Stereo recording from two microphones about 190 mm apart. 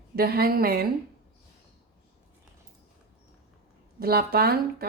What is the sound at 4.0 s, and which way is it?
Speech, 55° right (ahead or behind).